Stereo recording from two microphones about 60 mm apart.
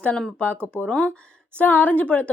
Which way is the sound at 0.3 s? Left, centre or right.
Left.